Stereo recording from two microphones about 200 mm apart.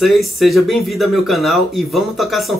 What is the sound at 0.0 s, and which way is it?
Speech, centre (ahead or behind).